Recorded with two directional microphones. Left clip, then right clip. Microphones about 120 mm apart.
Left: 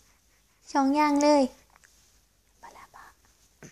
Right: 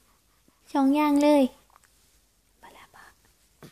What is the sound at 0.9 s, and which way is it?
Speech, 90° right.